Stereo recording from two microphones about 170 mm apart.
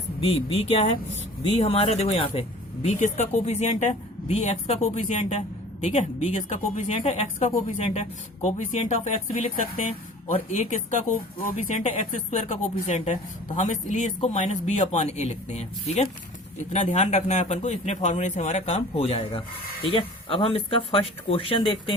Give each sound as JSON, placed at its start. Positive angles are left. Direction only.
{"t": 0.2, "sound": "speech", "side_deg": 35}
{"t": 3.0, "sound": "a woman's voice", "side_deg": 45}
{"t": 10.3, "sound": "a woman's voice", "side_deg": 40}